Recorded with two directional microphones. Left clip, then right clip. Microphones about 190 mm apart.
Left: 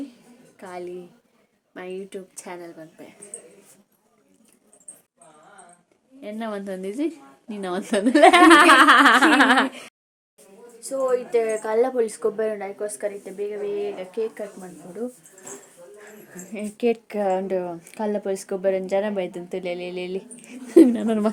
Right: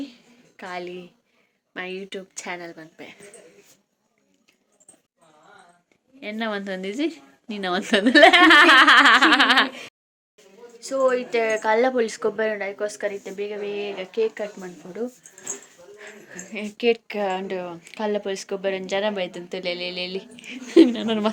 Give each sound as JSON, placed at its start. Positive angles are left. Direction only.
{"t": 0.0, "sound": "a sound", "side_deg": 5}
{"t": 1.7, "sound": "speech", "side_deg": 5}
{"t": 6.1, "sound": "speech", "side_deg": 5}
{"t": 11.0, "sound": "speech", "side_deg": 5}
{"t": 16.0, "sound": "speech", "side_deg": 30}